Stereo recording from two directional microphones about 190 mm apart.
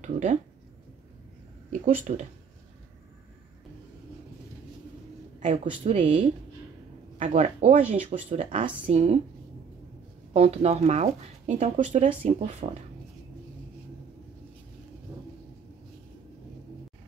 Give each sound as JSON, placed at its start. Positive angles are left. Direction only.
{"t": 0.0, "sound": "speech", "side_deg": -40}
{"t": 1.7, "sound": "speech", "side_deg": -40}
{"t": 5.4, "sound": "speech", "side_deg": -35}
{"t": 10.3, "sound": "speech", "side_deg": -35}